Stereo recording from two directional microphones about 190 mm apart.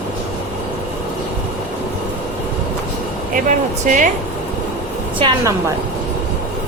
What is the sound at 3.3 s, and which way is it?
Speech, 40° right (ahead or behind).